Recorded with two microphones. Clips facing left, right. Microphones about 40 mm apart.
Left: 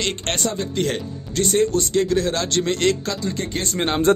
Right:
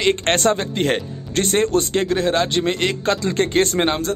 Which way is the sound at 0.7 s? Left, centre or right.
Right.